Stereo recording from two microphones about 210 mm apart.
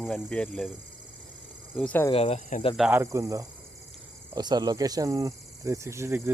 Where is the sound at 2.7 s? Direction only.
5° right (ahead or behind).